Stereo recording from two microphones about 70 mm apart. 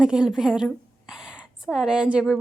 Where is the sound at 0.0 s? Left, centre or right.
Centre.